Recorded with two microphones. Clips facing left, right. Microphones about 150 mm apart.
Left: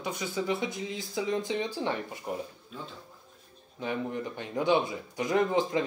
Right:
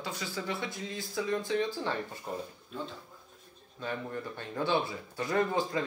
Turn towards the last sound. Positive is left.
turn(degrees=20)  # may be behind; listen again after turning